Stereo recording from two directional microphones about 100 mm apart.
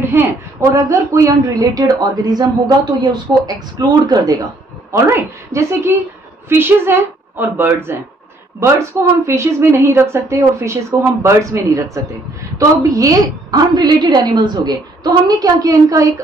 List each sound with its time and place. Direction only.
0.0 s a sound: 25° right (ahead or behind)
0.6 s a woman's voice: 30° right (ahead or behind)
4.9 s a woman's voice: 30° right (ahead or behind)
9.2 s a woman's voice: 30° right (ahead or behind)